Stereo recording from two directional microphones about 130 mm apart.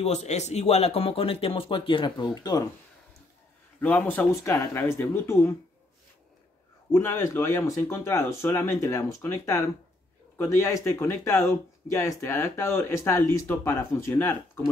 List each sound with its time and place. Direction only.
0.0 s speech: 55° left (ahead or behind); by 2.7 s 30° left (ahead or behind)
3.8 s speech: 15° left (ahead or behind)
6.9 s speech: 20° left (ahead or behind)